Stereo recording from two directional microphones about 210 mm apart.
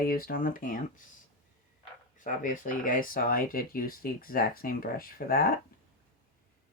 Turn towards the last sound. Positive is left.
turn(degrees=45)  # may be behind; listen again after turning